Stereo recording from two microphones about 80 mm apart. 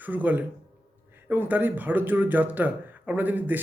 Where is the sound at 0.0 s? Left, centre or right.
Right.